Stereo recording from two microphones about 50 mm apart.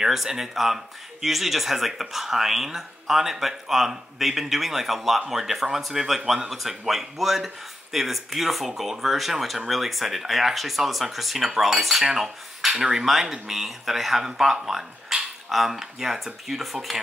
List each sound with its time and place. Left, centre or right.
0.0 s speech: centre